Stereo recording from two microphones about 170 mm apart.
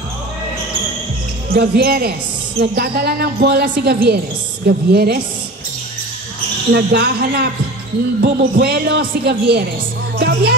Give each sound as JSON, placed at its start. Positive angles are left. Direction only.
{"t": 1.5, "sound": "speech", "side_deg": -65}
{"t": 6.7, "sound": "speech", "side_deg": -70}